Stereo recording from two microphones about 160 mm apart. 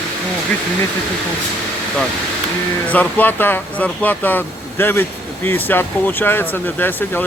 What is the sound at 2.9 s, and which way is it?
Speech, 10° left (ahead or behind).